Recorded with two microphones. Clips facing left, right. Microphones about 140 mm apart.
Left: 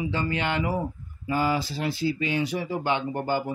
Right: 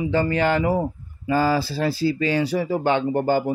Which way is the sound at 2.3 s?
40° right (ahead or behind).